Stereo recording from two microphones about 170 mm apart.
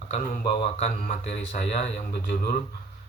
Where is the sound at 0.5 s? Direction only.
35° left (ahead or behind).